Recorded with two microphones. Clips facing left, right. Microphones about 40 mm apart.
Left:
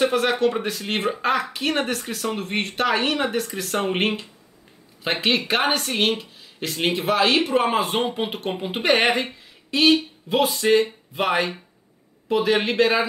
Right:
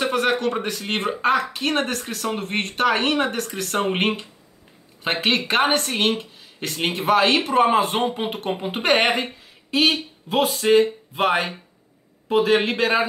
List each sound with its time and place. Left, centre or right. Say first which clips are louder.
0.0 s a sound: left 1 dB; centre
0.4 s speech: left 2 dB; centre
3.7 s speech: right 1 dB; centre